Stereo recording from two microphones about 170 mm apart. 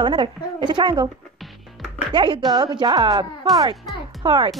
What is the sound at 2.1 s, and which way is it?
A woman's voice, 30° right (ahead or behind).